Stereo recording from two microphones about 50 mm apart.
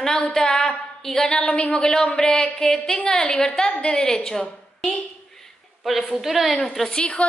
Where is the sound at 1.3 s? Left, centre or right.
Centre.